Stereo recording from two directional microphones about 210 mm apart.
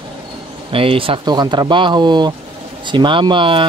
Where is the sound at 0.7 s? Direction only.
25° right (ahead or behind).